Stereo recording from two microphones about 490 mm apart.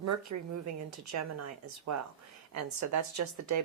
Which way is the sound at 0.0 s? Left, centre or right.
Right.